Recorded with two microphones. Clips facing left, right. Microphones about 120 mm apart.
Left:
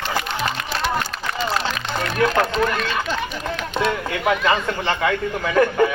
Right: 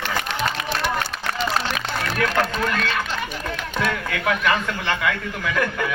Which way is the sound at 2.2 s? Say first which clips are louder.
Left 5 dB; 25° left (ahead or behind).